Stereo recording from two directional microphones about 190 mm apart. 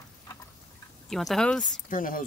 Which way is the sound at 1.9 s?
45° left (ahead or behind).